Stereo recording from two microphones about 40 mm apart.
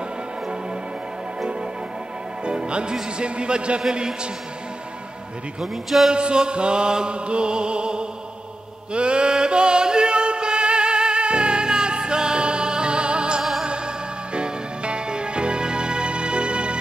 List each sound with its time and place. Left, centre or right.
1.4 s music: centre
2.4 s a man's voice: right
3.9 s mantra: right
5.6 s a man's voice: centre
6.1 s mantra: right
8.9 s music: right
13.4 s music: centre
13.7 s music: right